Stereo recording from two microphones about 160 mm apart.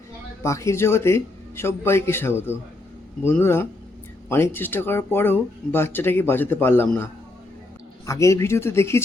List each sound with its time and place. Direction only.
0.4 s speech: 20° left (ahead or behind)